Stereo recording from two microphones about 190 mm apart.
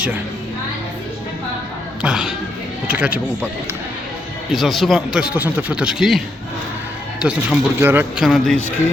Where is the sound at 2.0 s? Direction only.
5° right (ahead or behind).